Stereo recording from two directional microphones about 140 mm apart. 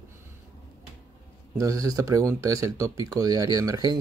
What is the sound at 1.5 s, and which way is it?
Speech, 25° right (ahead or behind).